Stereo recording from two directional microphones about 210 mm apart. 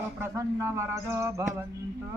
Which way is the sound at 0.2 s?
15° right (ahead or behind).